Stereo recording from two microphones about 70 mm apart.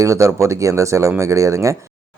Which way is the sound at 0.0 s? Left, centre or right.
Right.